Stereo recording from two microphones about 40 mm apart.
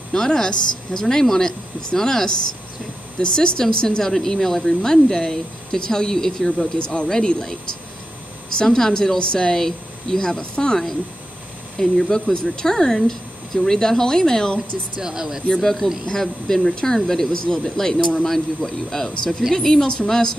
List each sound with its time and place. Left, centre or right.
0.1 s speech: centre
4.1 s speech: centre
8.6 s speech: centre
11.8 s speech: centre
15.0 s speech: centre
15.6 s speech: centre